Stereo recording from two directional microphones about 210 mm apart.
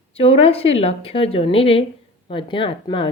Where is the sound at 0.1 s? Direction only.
25° left (ahead or behind).